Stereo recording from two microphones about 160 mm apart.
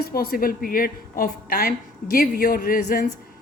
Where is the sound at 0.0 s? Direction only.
70° left (ahead or behind).